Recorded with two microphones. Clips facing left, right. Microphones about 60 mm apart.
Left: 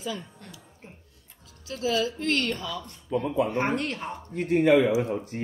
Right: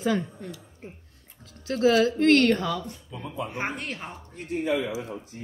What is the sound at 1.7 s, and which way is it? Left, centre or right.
A woman's voice, right.